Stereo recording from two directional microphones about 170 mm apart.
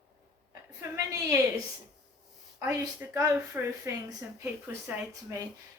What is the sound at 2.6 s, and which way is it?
A woman's voice, 20° right (ahead or behind).